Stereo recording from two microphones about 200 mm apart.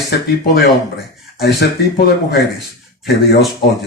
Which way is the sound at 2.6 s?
Centre (ahead or behind).